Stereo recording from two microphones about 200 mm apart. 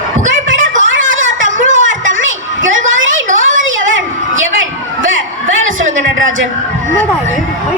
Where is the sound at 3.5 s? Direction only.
75° right (ahead or behind).